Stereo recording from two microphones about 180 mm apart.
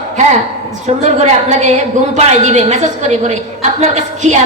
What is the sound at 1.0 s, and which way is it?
A woman's voice, 40° right (ahead or behind).